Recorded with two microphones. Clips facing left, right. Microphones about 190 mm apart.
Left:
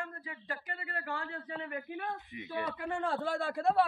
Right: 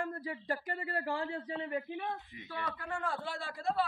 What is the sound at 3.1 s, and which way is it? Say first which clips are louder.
Speech: left 6 dB; 40° left (ahead or behind).